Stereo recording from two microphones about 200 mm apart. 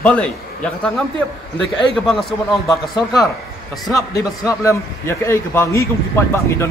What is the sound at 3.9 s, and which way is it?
A man's voice, 15° left (ahead or behind).